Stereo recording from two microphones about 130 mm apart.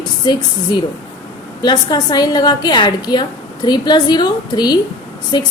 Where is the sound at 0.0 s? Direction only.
35° left (ahead or behind).